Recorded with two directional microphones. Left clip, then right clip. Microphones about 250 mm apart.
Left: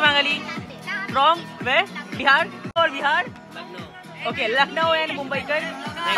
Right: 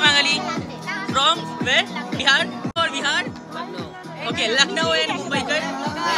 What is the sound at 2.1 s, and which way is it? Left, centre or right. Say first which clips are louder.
Speech: even; centre.